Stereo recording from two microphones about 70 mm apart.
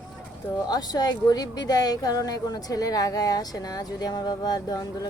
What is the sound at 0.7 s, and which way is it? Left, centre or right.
A woman's voice, left.